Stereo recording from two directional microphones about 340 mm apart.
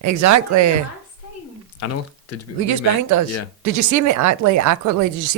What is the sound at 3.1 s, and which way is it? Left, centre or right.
Speech, right.